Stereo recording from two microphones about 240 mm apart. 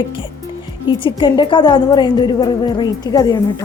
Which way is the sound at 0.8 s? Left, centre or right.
Centre.